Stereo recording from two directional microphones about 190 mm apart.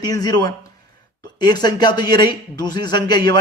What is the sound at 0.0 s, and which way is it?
A man's voice, 20° left (ahead or behind).